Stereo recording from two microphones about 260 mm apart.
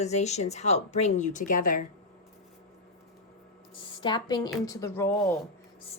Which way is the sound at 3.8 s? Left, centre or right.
Centre.